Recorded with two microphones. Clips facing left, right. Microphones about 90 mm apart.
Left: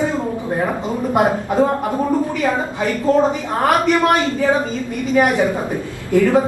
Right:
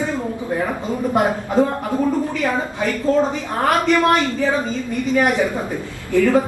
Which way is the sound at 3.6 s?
20° left (ahead or behind).